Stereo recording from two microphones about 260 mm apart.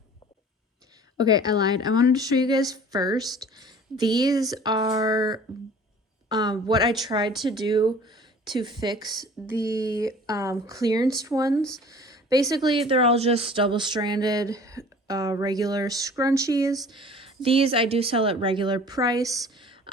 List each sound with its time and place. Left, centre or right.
1.2 s speech: centre